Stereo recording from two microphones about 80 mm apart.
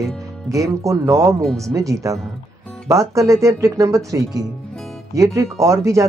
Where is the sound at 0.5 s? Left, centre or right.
Right.